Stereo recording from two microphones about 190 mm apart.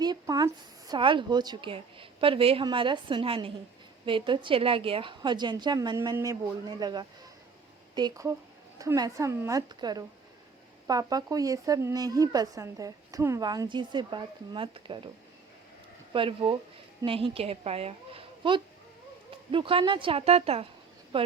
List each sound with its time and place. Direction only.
0.0 s a woman's voice: 20° right (ahead or behind)
16.1 s a woman's voice: 25° right (ahead or behind)